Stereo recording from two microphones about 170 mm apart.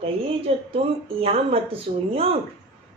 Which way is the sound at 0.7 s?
35° right (ahead or behind).